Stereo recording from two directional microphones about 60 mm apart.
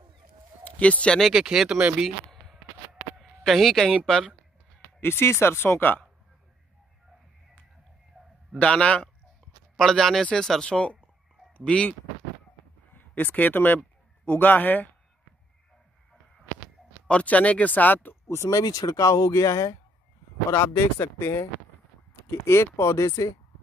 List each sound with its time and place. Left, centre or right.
0.7 s speech: left
1.3 s speech: centre
2.0 s a sound: centre
3.2 s speech: centre
5.0 s speech: left
8.6 s speech: centre
9.8 s speech: centre
13.1 s speech: left
17.1 s speech: left
18.3 s speech: left
18.6 s speech: left
20.5 s speech: left